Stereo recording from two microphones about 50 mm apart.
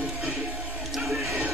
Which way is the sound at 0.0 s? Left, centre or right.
Centre.